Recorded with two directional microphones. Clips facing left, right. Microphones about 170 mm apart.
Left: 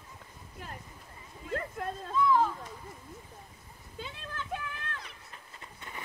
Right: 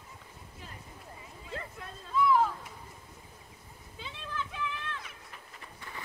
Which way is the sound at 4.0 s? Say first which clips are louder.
Right 1 dB; 50° left (ahead or behind).